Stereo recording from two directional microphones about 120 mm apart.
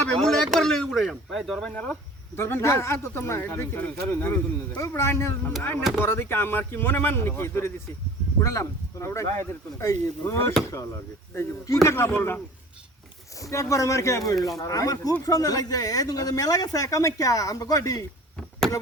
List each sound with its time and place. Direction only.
0.1 s speech: 5° left (ahead or behind); by 18.0 s 30° left (ahead or behind)